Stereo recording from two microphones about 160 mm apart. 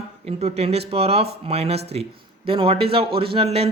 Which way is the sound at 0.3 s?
40° right (ahead or behind).